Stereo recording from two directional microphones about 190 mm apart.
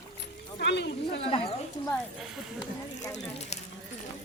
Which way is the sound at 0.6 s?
65° left (ahead or behind).